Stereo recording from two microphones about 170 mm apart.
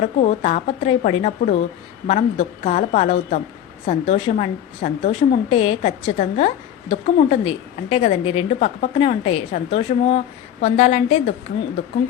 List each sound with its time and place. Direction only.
0.0 s a woman's voice: 45° left (ahead or behind)